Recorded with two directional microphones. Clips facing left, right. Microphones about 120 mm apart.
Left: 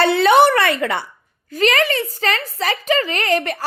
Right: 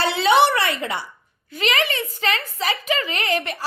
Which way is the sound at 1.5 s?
40° left (ahead or behind).